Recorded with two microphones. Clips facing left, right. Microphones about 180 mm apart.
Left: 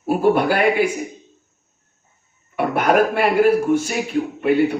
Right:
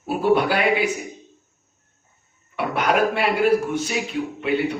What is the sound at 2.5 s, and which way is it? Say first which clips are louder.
Speech: left 4 dB; 50° left (ahead or behind).